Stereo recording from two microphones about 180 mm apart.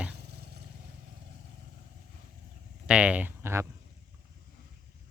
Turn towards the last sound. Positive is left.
turn(degrees=-15)  # may be behind; listen again after turning